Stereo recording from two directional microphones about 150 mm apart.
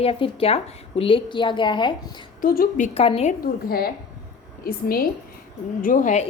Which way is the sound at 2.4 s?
70° left (ahead or behind).